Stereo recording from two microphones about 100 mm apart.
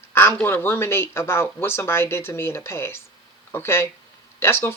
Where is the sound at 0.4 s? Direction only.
25° left (ahead or behind).